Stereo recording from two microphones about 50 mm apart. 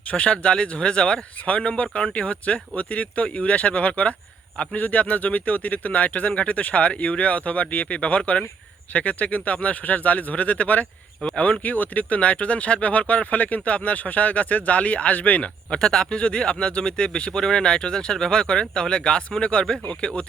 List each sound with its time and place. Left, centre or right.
0.1 s speech: left
11.2 s speech: left
11.6 s speech: left
15.8 s speech: centre